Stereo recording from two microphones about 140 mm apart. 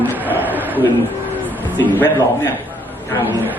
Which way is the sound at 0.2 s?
10° right (ahead or behind).